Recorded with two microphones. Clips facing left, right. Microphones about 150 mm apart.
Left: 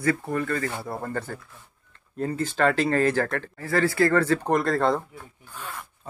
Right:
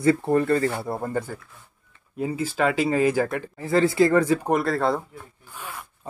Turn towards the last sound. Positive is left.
turn(degrees=-10)  # may be behind; listen again after turning